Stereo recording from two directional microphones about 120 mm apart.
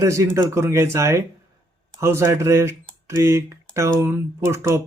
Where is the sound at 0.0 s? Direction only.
25° right (ahead or behind).